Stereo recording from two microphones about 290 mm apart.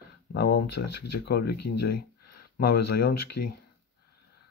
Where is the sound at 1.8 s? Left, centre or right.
Left.